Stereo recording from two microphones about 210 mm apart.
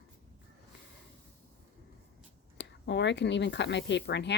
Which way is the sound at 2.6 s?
55° left (ahead or behind).